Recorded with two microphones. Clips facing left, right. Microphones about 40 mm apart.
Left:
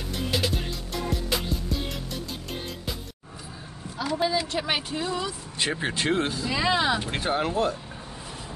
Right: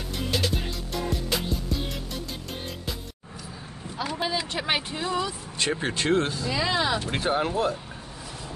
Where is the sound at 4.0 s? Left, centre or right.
Right.